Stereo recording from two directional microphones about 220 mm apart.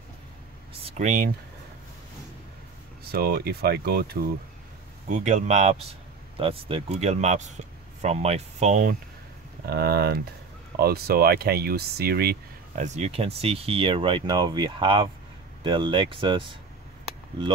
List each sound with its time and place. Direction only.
0.8 s speech: 35° right (ahead or behind)
3.1 s speech: 45° right (ahead or behind)
5.1 s speech: 35° right (ahead or behind)
9.7 s speech: 45° right (ahead or behind)
12.8 s speech: 30° right (ahead or behind)